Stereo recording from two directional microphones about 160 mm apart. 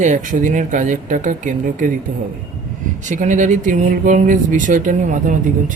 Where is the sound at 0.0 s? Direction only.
50° right (ahead or behind).